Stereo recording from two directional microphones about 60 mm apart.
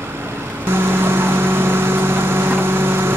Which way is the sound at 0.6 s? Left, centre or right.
Right.